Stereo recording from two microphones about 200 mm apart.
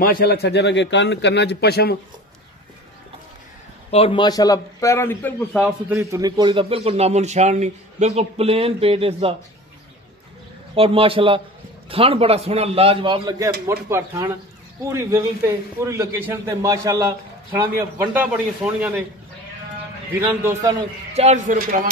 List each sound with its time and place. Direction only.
0.0 s a man's voice: 50° left (ahead or behind)
3.9 s a man's voice: 25° left (ahead or behind); by 5.6 s 10° left (ahead or behind)
5.6 s a man's voice: 10° right (ahead or behind); by 9.3 s 30° right (ahead or behind)
10.7 s a man's voice: 25° right (ahead or behind); by 19.0 s 5° right (ahead or behind)
20.2 s a man's voice: 10° right (ahead or behind)
21.1 s a man's voice: 35° right (ahead or behind)